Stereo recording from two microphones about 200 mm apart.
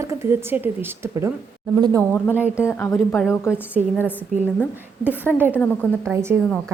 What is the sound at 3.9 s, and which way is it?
Speech, 10° left (ahead or behind).